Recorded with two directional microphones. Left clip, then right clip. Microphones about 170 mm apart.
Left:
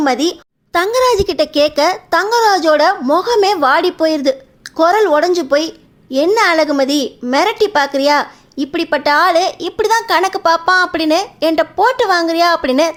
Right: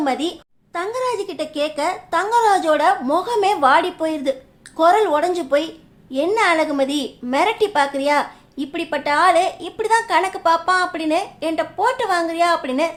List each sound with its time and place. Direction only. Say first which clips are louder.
0.0 s a woman's voice: left 7 dB; 35° left (ahead or behind)